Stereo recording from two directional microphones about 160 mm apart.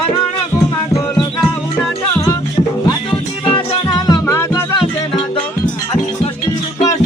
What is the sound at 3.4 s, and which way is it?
Music, 25° left (ahead or behind).